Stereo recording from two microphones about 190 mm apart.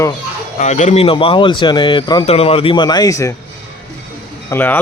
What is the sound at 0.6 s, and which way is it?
Speech, 40° left (ahead or behind).